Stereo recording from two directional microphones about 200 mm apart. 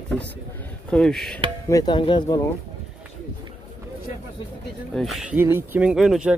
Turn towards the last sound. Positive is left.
turn(degrees=0)  # may be behind; listen again after turning